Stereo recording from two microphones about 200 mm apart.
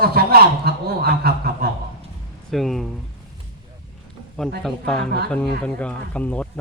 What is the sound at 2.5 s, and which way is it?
Speech, centre (ahead or behind).